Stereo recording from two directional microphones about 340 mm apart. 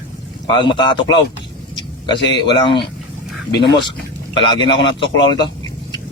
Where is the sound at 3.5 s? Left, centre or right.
Left.